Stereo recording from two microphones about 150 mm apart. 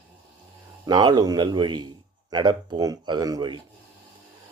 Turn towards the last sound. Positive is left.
turn(degrees=-25)  # may be behind; listen again after turning